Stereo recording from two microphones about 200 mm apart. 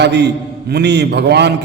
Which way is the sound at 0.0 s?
60° right (ahead or behind).